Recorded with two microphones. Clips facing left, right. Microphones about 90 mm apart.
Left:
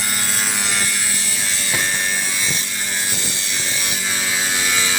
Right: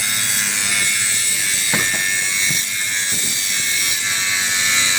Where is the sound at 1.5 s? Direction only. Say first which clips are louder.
Even; 40° left (ahead or behind).